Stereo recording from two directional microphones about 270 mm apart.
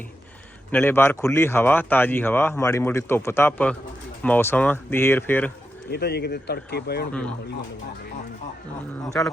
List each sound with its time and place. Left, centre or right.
0.7 s speech: centre
5.9 s speech: left
9.2 s speech: centre